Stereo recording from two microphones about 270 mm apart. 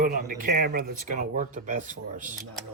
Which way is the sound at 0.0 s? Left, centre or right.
Right.